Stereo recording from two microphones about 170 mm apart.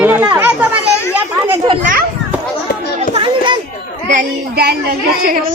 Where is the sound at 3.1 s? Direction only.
30° right (ahead or behind).